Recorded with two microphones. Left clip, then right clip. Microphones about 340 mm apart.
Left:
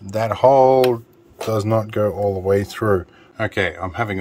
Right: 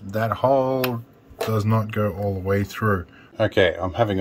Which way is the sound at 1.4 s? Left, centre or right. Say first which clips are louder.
Left 6 dB; centre.